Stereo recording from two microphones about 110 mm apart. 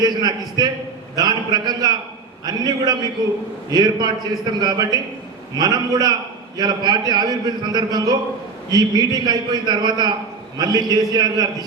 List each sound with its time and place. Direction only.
0.0 s a man's voice: 40° right (ahead or behind)